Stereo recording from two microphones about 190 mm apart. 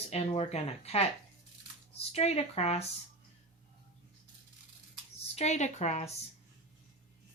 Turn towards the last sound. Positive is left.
turn(degrees=35)  # may be behind; listen again after turning